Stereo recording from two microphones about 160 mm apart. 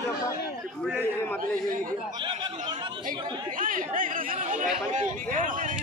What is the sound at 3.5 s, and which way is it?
Chatter, 60° right (ahead or behind).